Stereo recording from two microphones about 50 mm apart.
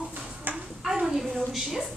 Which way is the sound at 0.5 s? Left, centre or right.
Right.